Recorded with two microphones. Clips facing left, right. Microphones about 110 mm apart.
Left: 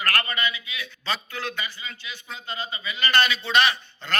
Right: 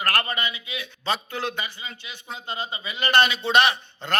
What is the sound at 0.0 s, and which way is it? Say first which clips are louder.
A man's voice: right 1 dB; 25° right (ahead or behind).